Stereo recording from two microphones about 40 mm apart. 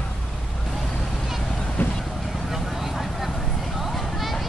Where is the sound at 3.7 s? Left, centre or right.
Centre.